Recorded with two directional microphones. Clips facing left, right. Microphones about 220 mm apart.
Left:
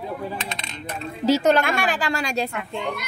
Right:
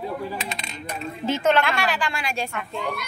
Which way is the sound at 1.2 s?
40° left (ahead or behind).